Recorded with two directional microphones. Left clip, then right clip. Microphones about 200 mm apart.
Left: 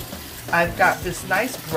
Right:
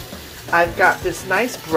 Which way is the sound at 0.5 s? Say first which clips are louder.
Right 3 dB; 30° right (ahead or behind).